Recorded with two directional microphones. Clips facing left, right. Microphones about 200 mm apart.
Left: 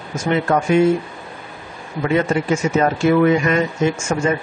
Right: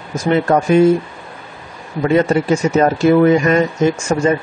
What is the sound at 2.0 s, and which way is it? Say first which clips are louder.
A man's voice: right 4 dB; 35° right (ahead or behind).